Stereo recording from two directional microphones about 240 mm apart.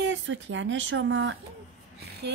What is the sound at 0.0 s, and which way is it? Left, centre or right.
Speech, right.